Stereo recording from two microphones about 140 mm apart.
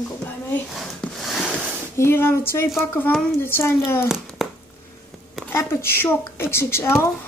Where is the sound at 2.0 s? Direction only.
15° left (ahead or behind).